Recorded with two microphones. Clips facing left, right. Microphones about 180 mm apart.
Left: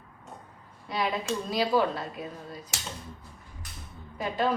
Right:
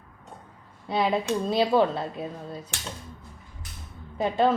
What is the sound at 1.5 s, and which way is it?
A woman's voice, 25° right (ahead or behind).